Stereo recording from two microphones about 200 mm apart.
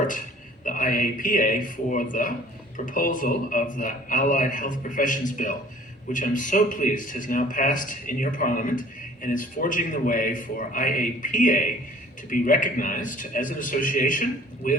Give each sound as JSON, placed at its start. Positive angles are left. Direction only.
{"t": 0.6, "sound": "a man's voice", "side_deg": 40}